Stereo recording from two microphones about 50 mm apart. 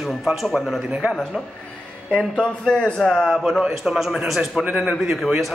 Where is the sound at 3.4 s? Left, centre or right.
Centre.